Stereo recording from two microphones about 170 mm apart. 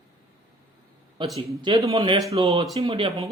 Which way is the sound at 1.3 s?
30° right (ahead or behind).